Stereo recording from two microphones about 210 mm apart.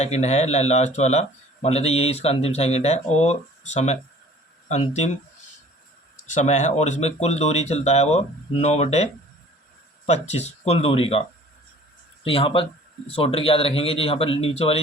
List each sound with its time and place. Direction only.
0.0 s speech: 30° left (ahead or behind)
6.3 s speech: 35° left (ahead or behind)
10.1 s a man's voice: 30° left (ahead or behind)
12.2 s a man's voice: 25° left (ahead or behind)